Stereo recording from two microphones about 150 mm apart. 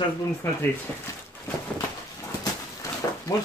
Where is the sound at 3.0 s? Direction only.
25° left (ahead or behind).